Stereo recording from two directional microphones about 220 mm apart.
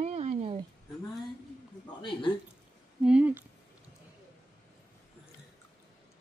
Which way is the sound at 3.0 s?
5° right (ahead or behind).